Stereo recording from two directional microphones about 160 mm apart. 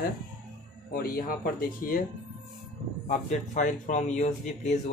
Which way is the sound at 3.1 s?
50° left (ahead or behind).